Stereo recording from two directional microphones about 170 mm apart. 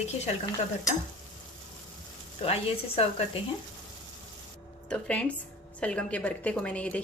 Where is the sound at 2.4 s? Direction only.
35° left (ahead or behind).